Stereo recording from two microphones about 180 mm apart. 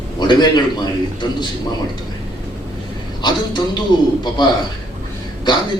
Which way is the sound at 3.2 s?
25° left (ahead or behind).